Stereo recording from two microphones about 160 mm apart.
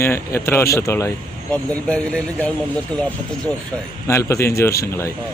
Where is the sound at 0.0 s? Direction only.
15° left (ahead or behind).